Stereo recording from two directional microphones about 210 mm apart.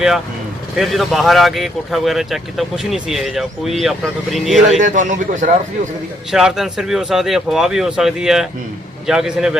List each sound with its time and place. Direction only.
0.8 s speech: centre (ahead or behind)
4.8 s a man's voice: 35° right (ahead or behind)
6.3 s speech: centre (ahead or behind)